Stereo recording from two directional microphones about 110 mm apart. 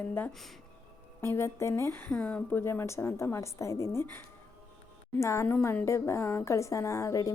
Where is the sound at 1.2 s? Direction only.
25° left (ahead or behind).